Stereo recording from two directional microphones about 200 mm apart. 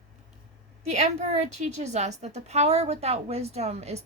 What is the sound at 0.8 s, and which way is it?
A woman's voice, 35° right (ahead or behind).